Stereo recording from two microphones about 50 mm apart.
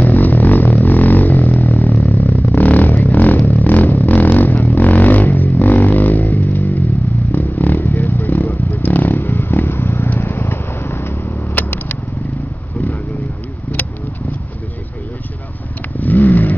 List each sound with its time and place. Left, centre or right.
0.0 s music: left
0.8 s a sound: left
2.0 s vehicle: left
16.0 s vehicle: left